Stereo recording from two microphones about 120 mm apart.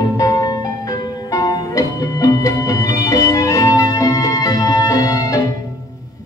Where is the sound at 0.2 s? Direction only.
30° left (ahead or behind).